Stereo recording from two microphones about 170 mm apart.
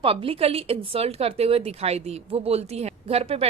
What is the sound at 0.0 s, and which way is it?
Speech, 30° right (ahead or behind).